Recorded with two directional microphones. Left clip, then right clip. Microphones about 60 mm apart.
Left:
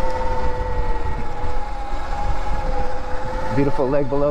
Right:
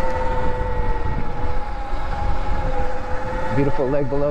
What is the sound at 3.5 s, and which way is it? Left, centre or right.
Speech, left.